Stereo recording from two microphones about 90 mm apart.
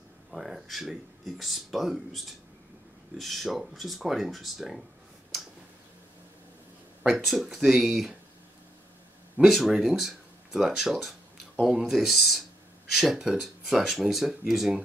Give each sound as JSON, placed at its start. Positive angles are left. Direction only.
{"t": 0.3, "sound": "speech", "side_deg": -5}
{"t": 7.0, "sound": "speech", "side_deg": 0}
{"t": 9.4, "sound": "speech", "side_deg": -5}